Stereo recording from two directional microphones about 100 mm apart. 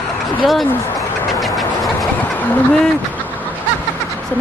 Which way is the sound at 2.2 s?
15° left (ahead or behind).